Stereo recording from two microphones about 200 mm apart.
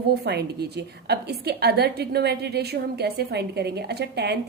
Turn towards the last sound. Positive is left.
turn(degrees=-55)  # may be behind; listen again after turning